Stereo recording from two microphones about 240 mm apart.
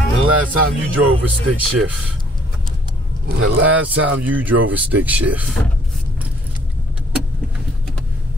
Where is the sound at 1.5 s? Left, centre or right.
Right.